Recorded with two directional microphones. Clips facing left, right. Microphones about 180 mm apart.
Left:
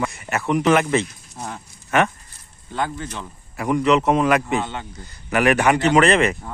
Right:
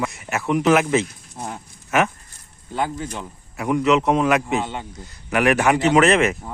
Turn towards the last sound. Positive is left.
turn(degrees=0)  # may be behind; listen again after turning